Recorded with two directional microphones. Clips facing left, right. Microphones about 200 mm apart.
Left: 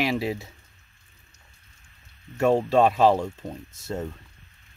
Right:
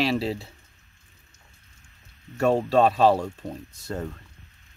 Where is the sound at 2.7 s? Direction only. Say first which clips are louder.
Even; 15° left (ahead or behind).